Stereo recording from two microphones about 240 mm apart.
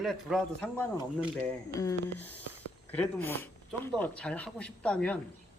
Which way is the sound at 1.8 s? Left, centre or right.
Centre.